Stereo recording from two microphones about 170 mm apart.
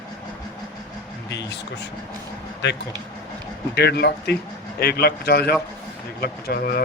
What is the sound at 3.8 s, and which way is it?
Speech, 75° left (ahead or behind).